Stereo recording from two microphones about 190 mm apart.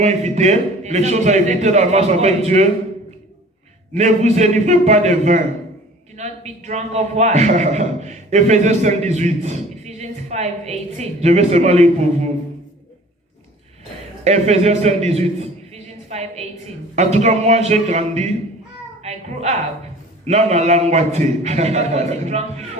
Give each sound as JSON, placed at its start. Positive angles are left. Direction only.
{"t": 0.0, "sound": "speech", "side_deg": -35}
{"t": 3.9, "sound": "speech", "side_deg": -35}
{"t": 14.3, "sound": "a man's voice", "side_deg": -35}
{"t": 19.0, "sound": "a sound", "side_deg": -35}
{"t": 20.2, "sound": "speech", "side_deg": -35}